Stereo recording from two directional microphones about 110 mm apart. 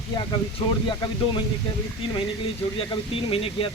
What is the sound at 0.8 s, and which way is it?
Speech, 45° left (ahead or behind).